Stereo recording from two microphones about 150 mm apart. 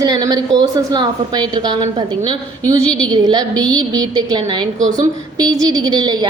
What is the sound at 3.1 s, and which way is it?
A woman's voice, 30° right (ahead or behind).